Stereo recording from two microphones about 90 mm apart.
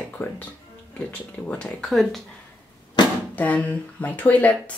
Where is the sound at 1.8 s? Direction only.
5° left (ahead or behind).